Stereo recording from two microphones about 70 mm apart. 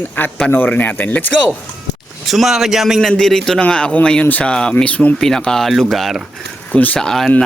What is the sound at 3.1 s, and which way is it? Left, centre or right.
Speech, centre.